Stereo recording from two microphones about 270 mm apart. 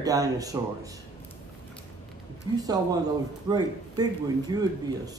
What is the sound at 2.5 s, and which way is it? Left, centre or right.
Speech, centre.